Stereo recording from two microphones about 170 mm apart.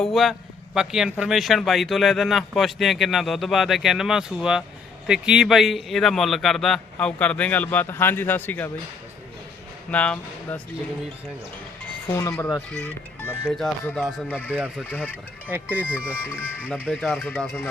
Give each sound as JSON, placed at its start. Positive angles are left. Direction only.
{"t": 0.0, "sound": "a man's voice", "side_deg": 0}
{"t": 9.9, "sound": "speech", "side_deg": 10}
{"t": 12.0, "sound": "speech", "side_deg": 15}
{"t": 14.5, "sound": "speech", "side_deg": -10}
{"t": 14.8, "sound": "speech", "side_deg": 10}
{"t": 15.4, "sound": "speech", "side_deg": -10}
{"t": 17.0, "sound": "speech", "side_deg": 5}
{"t": 17.3, "sound": "a man's voice", "side_deg": -5}